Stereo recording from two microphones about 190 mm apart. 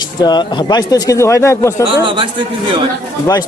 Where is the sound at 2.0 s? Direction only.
25° right (ahead or behind).